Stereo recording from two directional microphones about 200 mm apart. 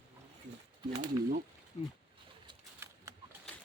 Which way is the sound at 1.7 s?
30° left (ahead or behind).